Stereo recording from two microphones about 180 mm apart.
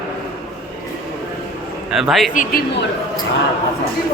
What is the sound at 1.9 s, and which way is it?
Speech, centre (ahead or behind).